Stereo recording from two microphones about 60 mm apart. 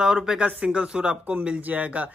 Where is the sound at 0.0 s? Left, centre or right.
Centre.